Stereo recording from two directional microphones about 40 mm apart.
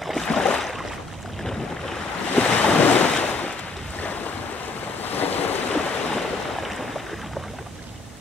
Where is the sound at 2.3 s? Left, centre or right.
Left.